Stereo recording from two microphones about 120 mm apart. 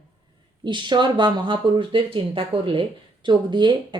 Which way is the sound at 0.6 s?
40° right (ahead or behind).